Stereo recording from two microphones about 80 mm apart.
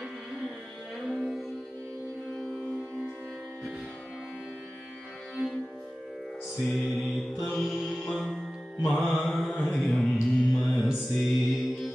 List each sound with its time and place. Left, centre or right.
1.0 s music: centre
5.3 s music: centre
6.9 s mantra: centre